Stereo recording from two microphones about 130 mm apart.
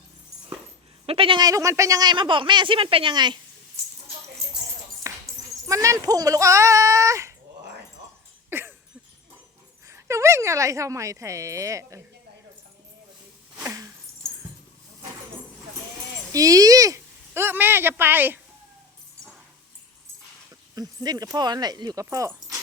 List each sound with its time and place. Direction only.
1.0 s speech: 45° right (ahead or behind)
1.4 s speech: 25° right (ahead or behind)
5.1 s dog: 25° right (ahead or behind)
5.6 s speech: 25° right (ahead or behind)
8.4 s a sound: 20° right (ahead or behind)
9.9 s speech: 25° right (ahead or behind)
13.7 s dog: 25° right (ahead or behind)
16.3 s speech: 25° right (ahead or behind)
20.7 s speech: 30° right (ahead or behind)